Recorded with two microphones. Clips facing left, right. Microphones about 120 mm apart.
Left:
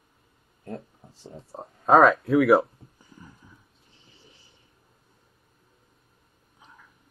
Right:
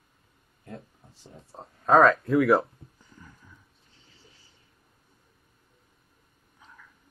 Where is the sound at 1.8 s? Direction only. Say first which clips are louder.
Left 2 dB; 5° left (ahead or behind).